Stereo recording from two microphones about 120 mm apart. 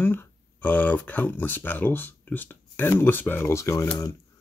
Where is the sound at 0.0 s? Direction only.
15° left (ahead or behind).